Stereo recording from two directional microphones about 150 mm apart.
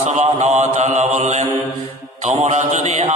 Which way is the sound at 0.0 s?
50° right (ahead or behind).